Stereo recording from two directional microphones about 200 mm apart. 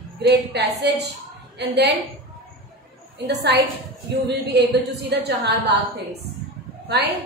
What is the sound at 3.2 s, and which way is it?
A woman's voice, 55° right (ahead or behind).